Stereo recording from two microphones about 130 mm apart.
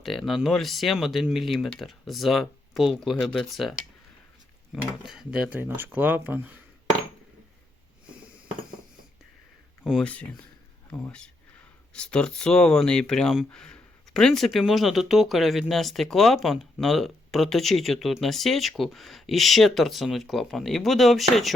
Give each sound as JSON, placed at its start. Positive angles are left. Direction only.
{"t": 0.0, "sound": "speech", "side_deg": 0}
{"t": 10.0, "sound": "speech", "side_deg": 10}